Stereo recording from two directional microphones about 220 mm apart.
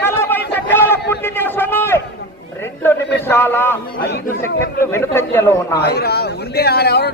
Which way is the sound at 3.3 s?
10° left (ahead or behind).